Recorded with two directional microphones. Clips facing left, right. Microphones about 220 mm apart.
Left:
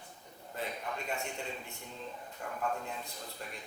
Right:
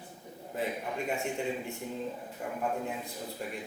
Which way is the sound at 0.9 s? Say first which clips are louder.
Right 6 dB; 10° right (ahead or behind).